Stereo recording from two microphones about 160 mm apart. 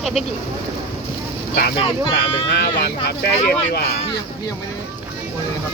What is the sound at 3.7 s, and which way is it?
Speech, 80° left.